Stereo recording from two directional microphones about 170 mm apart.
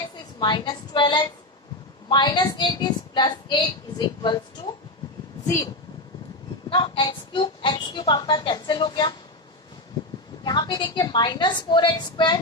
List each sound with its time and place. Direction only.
0.3 s a woman's voice: 25° left (ahead or behind)
6.7 s a woman's voice: 30° left (ahead or behind)
10.4 s a woman's voice: 25° left (ahead or behind)